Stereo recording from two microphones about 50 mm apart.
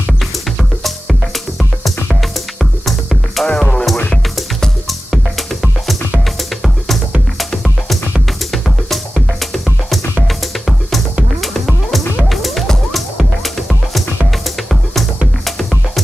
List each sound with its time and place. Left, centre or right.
2.6 s music: centre
3.4 s music: centre
4.8 s music: centre
7.3 s music: centre
11.4 s music: centre